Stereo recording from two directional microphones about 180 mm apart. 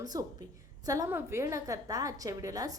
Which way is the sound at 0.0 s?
20° right (ahead or behind).